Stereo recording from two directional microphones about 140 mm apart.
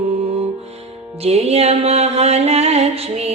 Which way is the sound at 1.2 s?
50° right (ahead or behind).